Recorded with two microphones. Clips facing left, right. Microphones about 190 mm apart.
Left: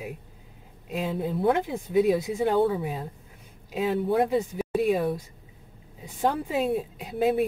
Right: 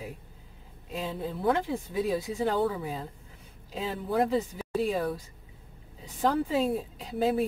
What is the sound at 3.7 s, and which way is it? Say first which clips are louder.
Speech: left 6 dB; 15° left (ahead or behind).